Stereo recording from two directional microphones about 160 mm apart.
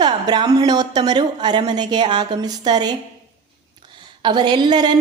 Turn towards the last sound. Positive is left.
turn(degrees=-25)  # may be behind; listen again after turning